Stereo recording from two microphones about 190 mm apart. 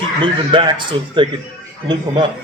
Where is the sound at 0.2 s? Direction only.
25° right (ahead or behind).